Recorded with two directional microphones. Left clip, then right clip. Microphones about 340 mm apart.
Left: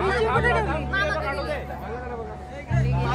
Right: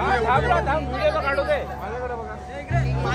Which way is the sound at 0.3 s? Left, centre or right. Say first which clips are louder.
Right 2 dB; right.